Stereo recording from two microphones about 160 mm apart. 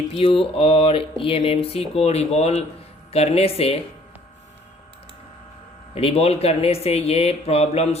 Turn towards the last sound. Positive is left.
turn(degrees=40)  # may be behind; listen again after turning